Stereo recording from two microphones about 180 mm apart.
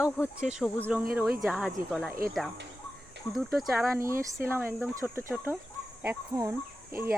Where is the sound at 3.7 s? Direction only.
15° right (ahead or behind).